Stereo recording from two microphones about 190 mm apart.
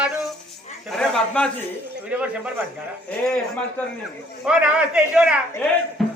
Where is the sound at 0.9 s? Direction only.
5° left (ahead or behind).